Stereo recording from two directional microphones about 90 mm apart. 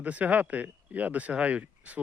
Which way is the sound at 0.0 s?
15° right (ahead or behind).